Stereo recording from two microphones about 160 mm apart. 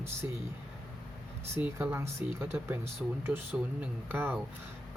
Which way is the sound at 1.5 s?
15° right (ahead or behind).